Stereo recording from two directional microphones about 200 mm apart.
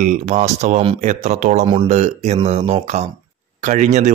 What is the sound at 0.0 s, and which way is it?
Speech, 40° right (ahead or behind).